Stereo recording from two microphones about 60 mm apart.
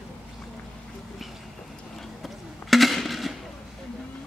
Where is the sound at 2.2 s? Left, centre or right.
Centre.